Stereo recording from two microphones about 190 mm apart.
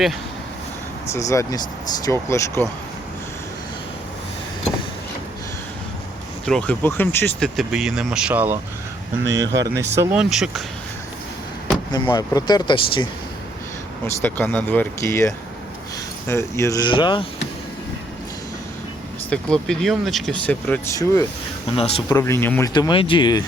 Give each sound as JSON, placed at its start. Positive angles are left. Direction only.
{"t": 1.1, "sound": "speech", "side_deg": 15}
{"t": 6.4, "sound": "speech", "side_deg": 5}
{"t": 9.5, "sound": "speech", "side_deg": -65}
{"t": 9.7, "sound": "speech", "side_deg": -15}
{"t": 11.9, "sound": "speech", "side_deg": 25}
{"t": 14.2, "sound": "speech", "side_deg": 10}
{"t": 19.3, "sound": "speech", "side_deg": 5}
{"t": 21.8, "sound": "speech", "side_deg": 30}
{"t": 22.1, "sound": "speech", "side_deg": 15}
{"t": 22.7, "sound": "speech", "side_deg": 25}